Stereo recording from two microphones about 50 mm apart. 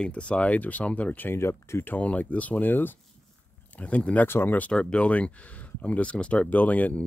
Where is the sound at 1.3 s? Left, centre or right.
Left.